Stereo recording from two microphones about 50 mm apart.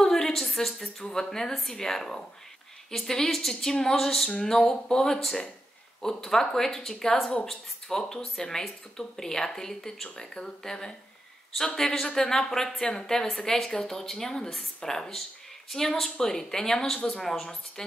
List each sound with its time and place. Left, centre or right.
0.0 s a woman's voice: centre
3.9 s a sound: centre
4.4 s a woman's voice: centre